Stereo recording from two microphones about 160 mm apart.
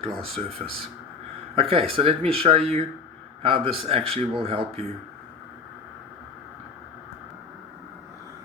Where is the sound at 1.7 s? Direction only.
35° right (ahead or behind).